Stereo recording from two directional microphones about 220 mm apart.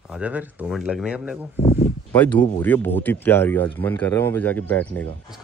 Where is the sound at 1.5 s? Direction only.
30° left (ahead or behind).